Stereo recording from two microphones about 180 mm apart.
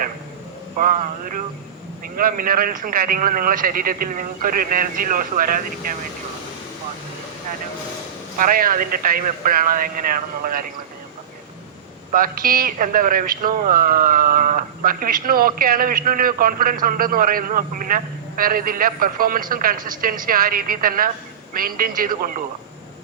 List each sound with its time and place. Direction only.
0.8 s speech: 45° right (ahead or behind)
8.4 s speech: 50° right (ahead or behind)
12.1 s speech: 50° right (ahead or behind)